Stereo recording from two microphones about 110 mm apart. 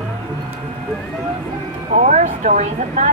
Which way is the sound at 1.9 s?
90° right.